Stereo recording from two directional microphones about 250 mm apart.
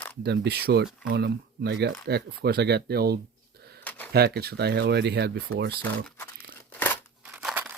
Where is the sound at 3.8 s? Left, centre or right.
Centre.